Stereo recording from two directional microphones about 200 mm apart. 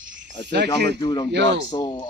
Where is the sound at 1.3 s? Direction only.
65° right (ahead or behind).